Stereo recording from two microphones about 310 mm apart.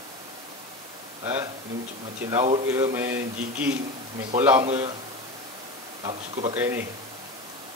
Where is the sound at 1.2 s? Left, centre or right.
Centre.